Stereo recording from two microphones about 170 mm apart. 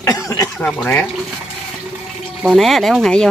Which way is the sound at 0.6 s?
10° left (ahead or behind).